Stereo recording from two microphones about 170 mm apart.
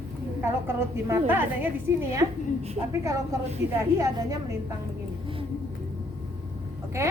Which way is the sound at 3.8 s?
15° right (ahead or behind).